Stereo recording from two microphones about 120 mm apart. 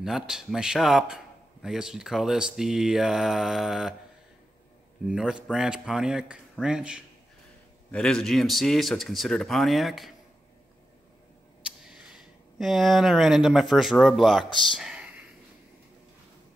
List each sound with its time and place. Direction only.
0.0 s speech: 5° right (ahead or behind)
5.0 s speech: 5° right (ahead or behind)
7.9 s speech: 5° left (ahead or behind)
12.5 s speech: centre (ahead or behind)